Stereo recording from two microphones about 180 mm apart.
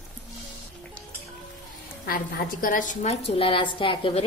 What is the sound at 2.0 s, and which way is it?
A woman's voice, 50° left (ahead or behind).